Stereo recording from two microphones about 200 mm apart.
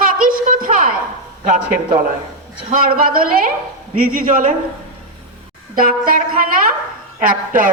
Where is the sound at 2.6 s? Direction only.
40° right (ahead or behind).